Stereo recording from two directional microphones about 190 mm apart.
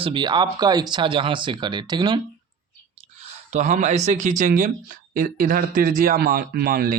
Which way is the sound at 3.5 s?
40° right (ahead or behind).